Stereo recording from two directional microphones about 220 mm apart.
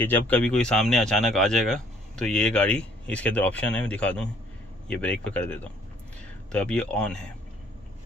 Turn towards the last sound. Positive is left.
turn(degrees=5)  # may be behind; listen again after turning